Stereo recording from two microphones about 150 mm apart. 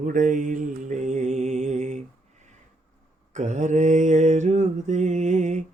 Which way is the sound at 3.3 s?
55° right (ahead or behind).